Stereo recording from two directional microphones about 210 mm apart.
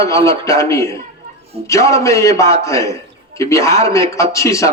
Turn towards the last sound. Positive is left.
turn(degrees=15)  # may be behind; listen again after turning